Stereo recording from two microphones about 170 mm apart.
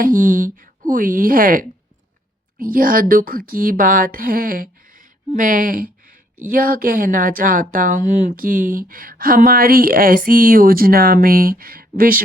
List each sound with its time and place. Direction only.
0.0 s a woman's voice: 55° right (ahead or behind)